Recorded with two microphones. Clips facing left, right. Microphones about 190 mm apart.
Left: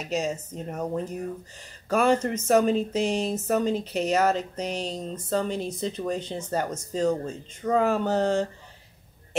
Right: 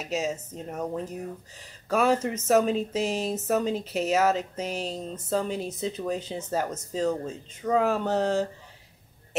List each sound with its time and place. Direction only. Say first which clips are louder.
0.0 s speech: left 1 dB; 5° right (ahead or behind)